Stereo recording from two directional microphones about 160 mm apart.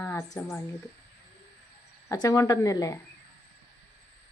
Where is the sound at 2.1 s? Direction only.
20° left (ahead or behind).